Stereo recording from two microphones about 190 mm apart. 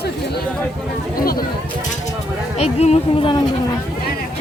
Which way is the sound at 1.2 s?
50° left (ahead or behind).